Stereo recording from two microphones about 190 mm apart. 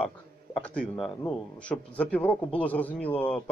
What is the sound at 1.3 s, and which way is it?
A man's voice, 5° left (ahead or behind).